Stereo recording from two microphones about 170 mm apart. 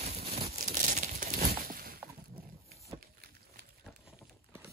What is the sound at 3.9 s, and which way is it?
Clip-clop, 5° right (ahead or behind).